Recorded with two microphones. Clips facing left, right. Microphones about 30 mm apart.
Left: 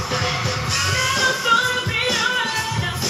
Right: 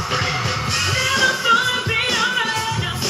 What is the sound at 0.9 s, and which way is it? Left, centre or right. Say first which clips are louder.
Music: right 2 dB; centre.